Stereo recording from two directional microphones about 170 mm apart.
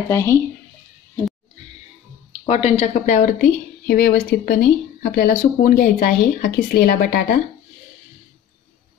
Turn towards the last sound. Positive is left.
turn(degrees=55)  # may be behind; listen again after turning